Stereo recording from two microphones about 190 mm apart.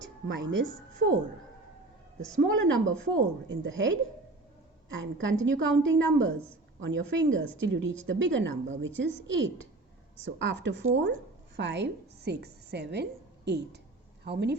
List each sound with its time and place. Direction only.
0.3 s a woman's voice: 85° right
2.4 s a woman's voice: 85° right
4.9 s a woman's voice: 85° right; by 14.5 s 60° right (ahead or behind)